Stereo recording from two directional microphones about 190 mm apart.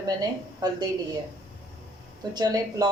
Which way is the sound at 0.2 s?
20° right (ahead or behind).